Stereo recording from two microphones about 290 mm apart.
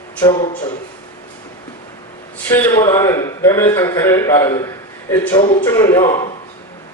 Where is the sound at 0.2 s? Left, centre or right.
Centre.